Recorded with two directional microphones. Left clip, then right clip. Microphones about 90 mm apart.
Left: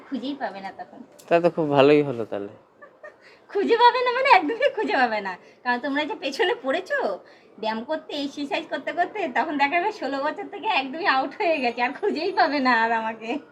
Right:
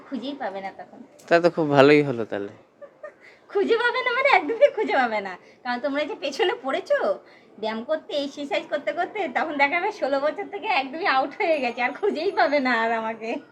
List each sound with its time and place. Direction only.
0.1 s a woman's voice: 20° right (ahead or behind)
1.3 s speech: 50° right (ahead or behind)
3.5 s a woman's voice: 20° right (ahead or behind)